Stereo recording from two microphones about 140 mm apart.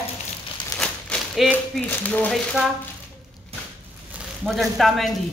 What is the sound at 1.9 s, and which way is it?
Speech, 10° left (ahead or behind).